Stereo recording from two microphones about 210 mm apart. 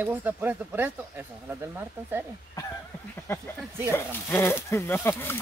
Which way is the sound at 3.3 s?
10° left (ahead or behind).